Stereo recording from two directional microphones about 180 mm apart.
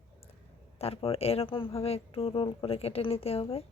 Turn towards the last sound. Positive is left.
turn(degrees=30)  # may be behind; listen again after turning